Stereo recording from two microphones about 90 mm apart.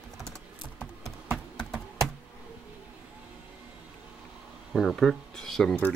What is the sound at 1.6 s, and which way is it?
Computer keyboard, 5° left (ahead or behind).